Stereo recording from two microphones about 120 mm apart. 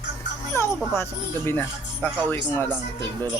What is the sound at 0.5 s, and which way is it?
Speech, 20° left (ahead or behind).